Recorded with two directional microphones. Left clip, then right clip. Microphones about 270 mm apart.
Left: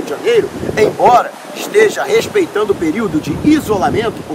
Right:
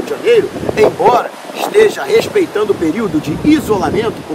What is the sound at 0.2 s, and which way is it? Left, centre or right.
Speech, centre.